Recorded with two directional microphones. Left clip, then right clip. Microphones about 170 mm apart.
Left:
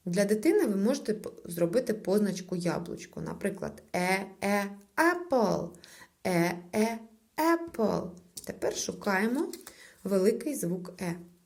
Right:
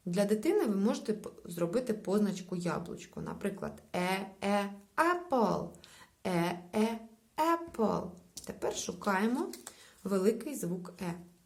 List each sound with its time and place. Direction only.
0.1 s speech: 15° left (ahead or behind)
6.2 s a sound: 15° left (ahead or behind)
8.4 s speech: 15° left (ahead or behind)